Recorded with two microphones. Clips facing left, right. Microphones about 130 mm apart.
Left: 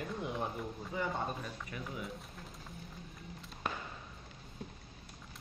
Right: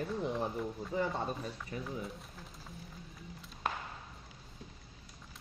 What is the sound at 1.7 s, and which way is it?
Speech, 30° right (ahead or behind).